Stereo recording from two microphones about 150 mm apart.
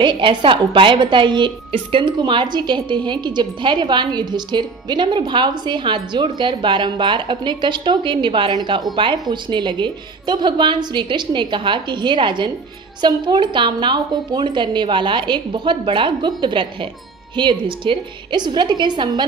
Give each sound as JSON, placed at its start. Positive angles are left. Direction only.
{"t": 0.0, "sound": "a woman's voice", "side_deg": -35}